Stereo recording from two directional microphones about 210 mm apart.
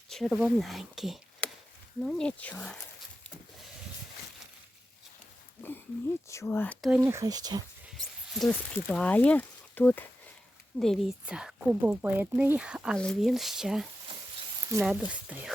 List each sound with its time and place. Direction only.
0.1 s speech: centre (ahead or behind)
6.2 s speech: 15° left (ahead or behind)
6.9 s speech: 15° right (ahead or behind)
7.9 s speech: centre (ahead or behind)
14.1 s sizzle: 25° right (ahead or behind)
14.8 s speech: 5° right (ahead or behind)